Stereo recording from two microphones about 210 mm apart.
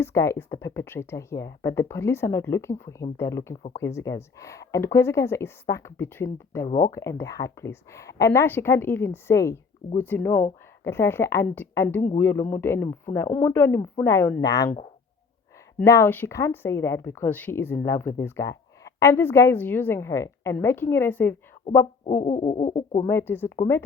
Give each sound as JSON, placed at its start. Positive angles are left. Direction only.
{"t": 0.0, "sound": "speech", "side_deg": 15}
{"t": 15.8, "sound": "speech", "side_deg": 15}
{"t": 22.0, "sound": "speech", "side_deg": 35}
{"t": 23.0, "sound": "speech", "side_deg": 10}